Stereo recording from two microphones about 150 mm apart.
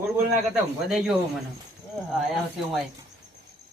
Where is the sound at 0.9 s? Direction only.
5° right (ahead or behind).